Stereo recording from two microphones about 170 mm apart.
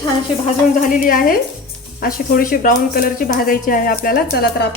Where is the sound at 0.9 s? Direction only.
55° left (ahead or behind).